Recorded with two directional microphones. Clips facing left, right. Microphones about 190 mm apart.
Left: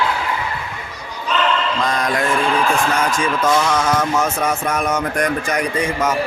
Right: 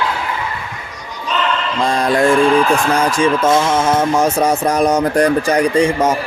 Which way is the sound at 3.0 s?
30° right (ahead or behind).